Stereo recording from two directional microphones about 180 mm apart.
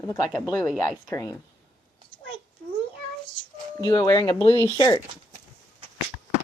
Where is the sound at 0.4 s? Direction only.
5° right (ahead or behind).